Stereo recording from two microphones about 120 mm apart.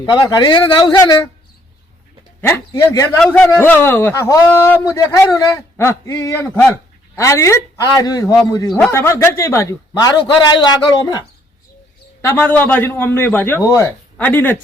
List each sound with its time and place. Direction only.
0.0 s speech: 35° left (ahead or behind)
2.9 s a man's voice: 25° left (ahead or behind)
12.2 s a man's voice: 15° left (ahead or behind)